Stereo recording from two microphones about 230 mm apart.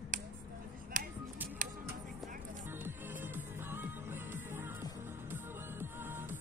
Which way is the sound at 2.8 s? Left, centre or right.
Centre.